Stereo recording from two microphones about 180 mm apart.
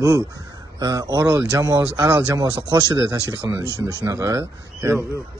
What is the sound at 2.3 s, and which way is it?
Speech, 20° right (ahead or behind).